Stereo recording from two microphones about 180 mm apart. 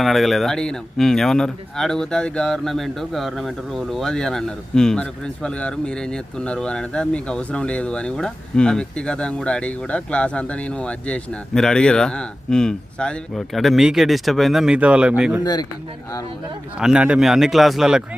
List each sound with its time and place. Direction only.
0.0 s speech: centre (ahead or behind)
16.7 s speech: 5° right (ahead or behind)